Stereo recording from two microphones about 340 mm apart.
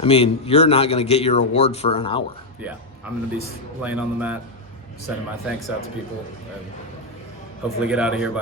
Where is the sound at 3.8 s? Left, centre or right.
Centre.